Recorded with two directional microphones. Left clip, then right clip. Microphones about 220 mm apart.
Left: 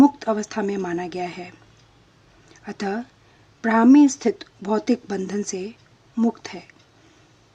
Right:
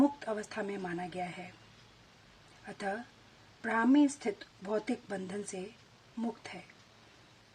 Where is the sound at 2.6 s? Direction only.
35° left (ahead or behind).